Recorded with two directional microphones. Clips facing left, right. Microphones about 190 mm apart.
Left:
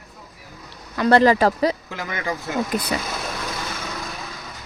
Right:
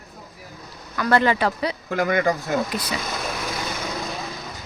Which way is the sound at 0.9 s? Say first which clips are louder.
Left 4 dB; 30° left (ahead or behind).